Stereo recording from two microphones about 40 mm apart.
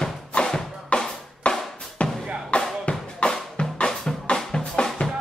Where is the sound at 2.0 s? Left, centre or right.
Left.